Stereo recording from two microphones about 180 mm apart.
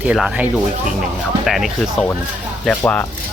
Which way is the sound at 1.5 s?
Centre (ahead or behind).